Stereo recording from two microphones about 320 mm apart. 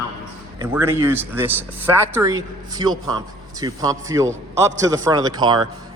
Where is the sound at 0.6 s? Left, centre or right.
Centre.